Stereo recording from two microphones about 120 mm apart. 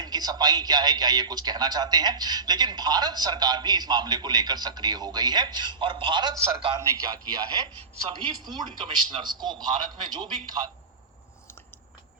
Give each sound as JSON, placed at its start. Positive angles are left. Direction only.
{"t": 0.0, "sound": "a man's voice", "side_deg": -35}
{"t": 6.7, "sound": "a man's voice", "side_deg": -30}